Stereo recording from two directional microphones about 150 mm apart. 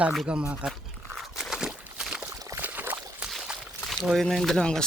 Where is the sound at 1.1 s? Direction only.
Centre (ahead or behind).